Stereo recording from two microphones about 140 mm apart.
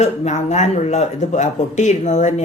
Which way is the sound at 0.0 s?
55° left (ahead or behind).